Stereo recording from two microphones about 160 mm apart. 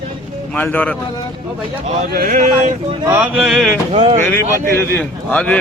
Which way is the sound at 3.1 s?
5° right (ahead or behind).